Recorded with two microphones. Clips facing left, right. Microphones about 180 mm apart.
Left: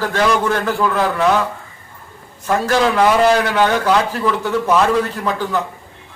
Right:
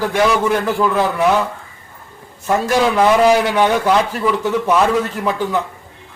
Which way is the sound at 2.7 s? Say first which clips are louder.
Right 1 dB; 10° right (ahead or behind).